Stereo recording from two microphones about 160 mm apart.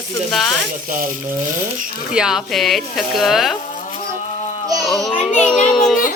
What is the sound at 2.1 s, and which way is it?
Speech, 5° right (ahead or behind).